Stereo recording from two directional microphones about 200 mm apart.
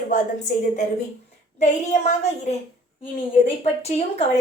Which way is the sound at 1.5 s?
35° left (ahead or behind).